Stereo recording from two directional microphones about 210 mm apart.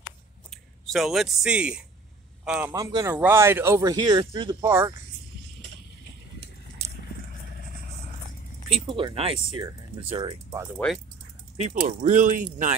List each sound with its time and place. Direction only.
0.5 s a man's voice: centre (ahead or behind)
2.7 s speech: 20° right (ahead or behind)
8.7 s speech: 25° right (ahead or behind)
11.6 s speech: 35° right (ahead or behind)